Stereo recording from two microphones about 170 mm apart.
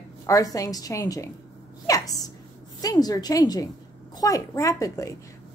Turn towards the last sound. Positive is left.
turn(degrees=20)  # may be behind; listen again after turning